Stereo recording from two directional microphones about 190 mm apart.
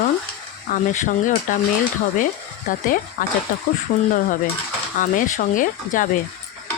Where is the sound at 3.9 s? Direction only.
50° left (ahead or behind).